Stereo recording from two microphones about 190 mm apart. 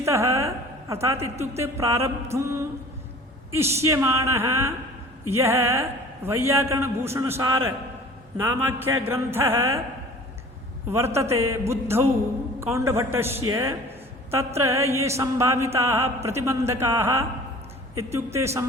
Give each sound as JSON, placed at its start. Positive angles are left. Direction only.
{"t": 0.0, "sound": "a sound", "side_deg": -15}
{"t": 1.0, "sound": "mantra", "side_deg": -15}
{"t": 10.8, "sound": "mantra", "side_deg": -15}